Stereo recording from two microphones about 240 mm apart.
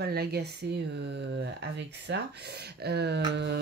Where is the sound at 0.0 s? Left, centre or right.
Right.